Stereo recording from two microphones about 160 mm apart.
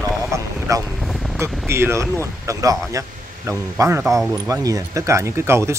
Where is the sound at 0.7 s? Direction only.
20° right (ahead or behind).